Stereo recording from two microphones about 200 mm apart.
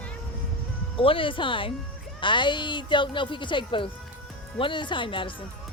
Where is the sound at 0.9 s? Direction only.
25° left (ahead or behind).